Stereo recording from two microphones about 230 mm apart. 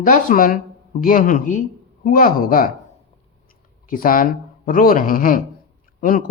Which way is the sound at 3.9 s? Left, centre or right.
Left.